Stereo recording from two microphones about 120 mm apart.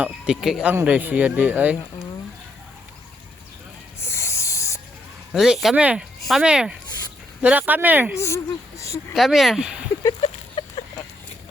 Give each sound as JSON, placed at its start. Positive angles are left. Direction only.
{"t": 0.0, "sound": "a man's voice", "side_deg": -5}
{"t": 4.0, "sound": "a sound", "side_deg": 20}
{"t": 5.3, "sound": "a man's voice", "side_deg": -5}
{"t": 8.1, "sound": "speech", "side_deg": 25}
{"t": 9.1, "sound": "speech", "side_deg": 0}
{"t": 10.2, "sound": "a sound", "side_deg": 50}